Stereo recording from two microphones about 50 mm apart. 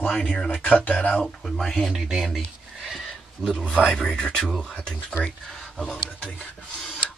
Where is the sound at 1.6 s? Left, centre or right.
Centre.